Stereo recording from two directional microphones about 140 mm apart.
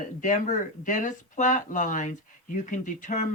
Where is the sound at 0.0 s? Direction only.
65° left (ahead or behind).